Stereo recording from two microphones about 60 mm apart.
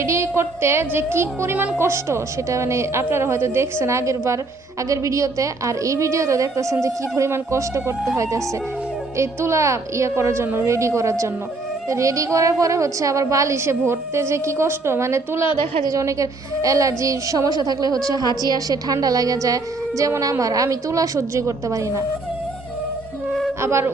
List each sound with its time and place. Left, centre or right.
0.0 s a woman's voice: right
6.8 s a woman's voice: right
10.7 s a woman's voice: right
15.8 s a woman's voice: right
23.6 s a woman's voice: right